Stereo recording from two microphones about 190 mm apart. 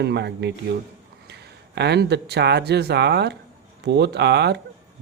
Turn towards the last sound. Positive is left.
turn(degrees=-60)  # may be behind; listen again after turning